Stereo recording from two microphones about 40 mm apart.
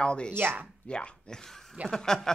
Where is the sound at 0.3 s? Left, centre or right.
Right.